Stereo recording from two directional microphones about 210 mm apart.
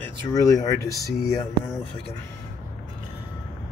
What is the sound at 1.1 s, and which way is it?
Speech, centre (ahead or behind).